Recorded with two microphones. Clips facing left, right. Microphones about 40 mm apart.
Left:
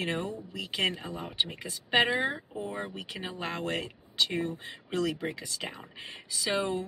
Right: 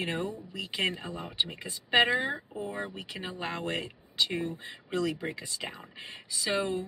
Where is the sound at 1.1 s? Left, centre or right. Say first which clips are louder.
Even; left.